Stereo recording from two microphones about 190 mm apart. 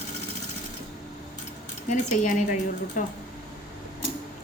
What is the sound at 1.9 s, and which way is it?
Speech, 40° left (ahead or behind).